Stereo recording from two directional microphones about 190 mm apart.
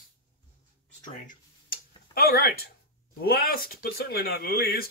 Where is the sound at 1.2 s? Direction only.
50° left (ahead or behind).